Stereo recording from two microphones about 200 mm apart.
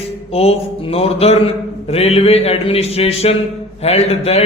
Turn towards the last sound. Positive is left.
turn(degrees=30)  # may be behind; listen again after turning